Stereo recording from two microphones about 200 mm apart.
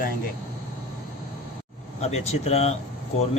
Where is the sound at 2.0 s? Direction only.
30° left (ahead or behind).